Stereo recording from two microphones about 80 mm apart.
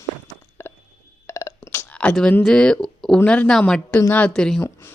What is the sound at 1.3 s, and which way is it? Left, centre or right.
Burping, left.